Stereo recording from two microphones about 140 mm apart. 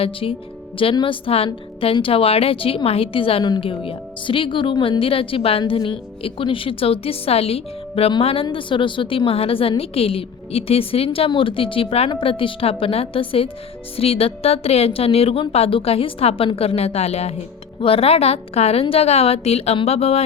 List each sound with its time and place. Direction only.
0.0 s a woman's voice: 40° left (ahead or behind)